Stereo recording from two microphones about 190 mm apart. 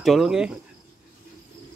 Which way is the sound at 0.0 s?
Centre (ahead or behind).